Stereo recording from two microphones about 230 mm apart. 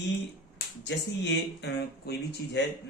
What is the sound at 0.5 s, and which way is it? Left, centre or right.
Speech, left.